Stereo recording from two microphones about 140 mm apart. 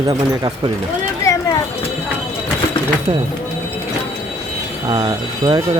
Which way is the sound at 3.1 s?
40° right (ahead or behind).